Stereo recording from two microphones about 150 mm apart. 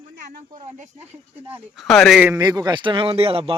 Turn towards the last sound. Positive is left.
turn(degrees=-40)  # may be behind; listen again after turning